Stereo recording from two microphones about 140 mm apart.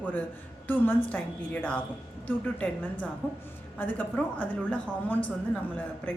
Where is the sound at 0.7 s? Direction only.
10° left (ahead or behind).